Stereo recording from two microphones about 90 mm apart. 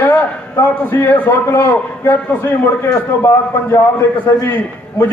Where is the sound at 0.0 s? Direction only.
20° left (ahead or behind).